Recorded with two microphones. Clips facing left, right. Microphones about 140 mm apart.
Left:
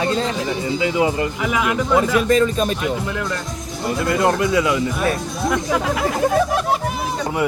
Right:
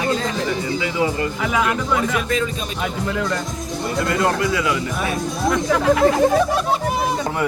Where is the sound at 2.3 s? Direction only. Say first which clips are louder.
Left 7 dB; 45° left (ahead or behind).